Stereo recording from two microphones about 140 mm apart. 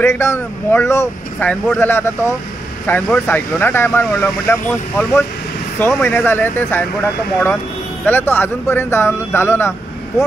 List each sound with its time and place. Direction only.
0.0 s speech: 20° left (ahead or behind)
8.0 s speech: 15° left (ahead or behind)